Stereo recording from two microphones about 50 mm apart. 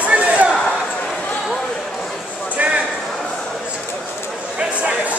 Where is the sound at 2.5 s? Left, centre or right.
Right.